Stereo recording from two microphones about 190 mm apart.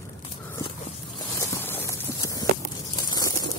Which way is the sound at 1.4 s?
10° left (ahead or behind).